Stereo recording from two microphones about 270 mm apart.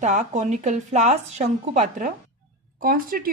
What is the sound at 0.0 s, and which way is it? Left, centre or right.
A woman's voice, right.